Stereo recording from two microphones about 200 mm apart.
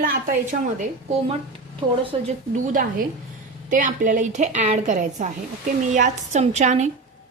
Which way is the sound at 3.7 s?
40° right (ahead or behind).